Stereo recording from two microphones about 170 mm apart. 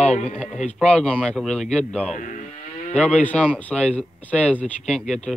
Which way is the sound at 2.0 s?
50° left (ahead or behind).